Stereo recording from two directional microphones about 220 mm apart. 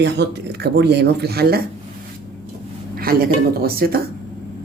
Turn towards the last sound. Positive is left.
turn(degrees=-45)  # may be behind; listen again after turning